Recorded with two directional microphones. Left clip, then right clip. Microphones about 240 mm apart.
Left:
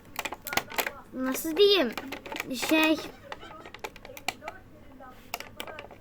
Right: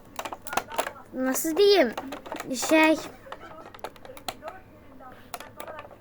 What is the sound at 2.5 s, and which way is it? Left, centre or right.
Speech, centre.